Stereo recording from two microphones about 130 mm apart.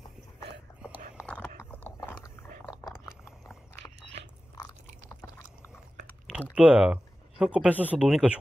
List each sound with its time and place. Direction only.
1.2 s whispering: 25° left (ahead or behind)
1.6 s a sound: 15° left (ahead or behind)
4.6 s chewing: 30° left (ahead or behind)
6.5 s speech: 10° right (ahead or behind)